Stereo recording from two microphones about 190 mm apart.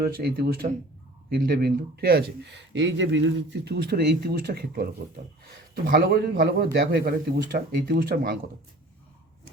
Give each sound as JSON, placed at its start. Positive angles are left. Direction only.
{"t": 0.0, "sound": "speech", "side_deg": -55}
{"t": 3.6, "sound": "speech", "side_deg": -60}